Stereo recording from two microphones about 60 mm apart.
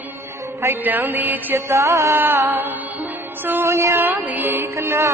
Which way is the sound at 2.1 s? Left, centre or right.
Right.